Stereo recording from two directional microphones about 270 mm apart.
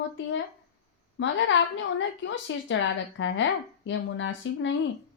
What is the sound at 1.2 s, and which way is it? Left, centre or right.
A woman's voice, left.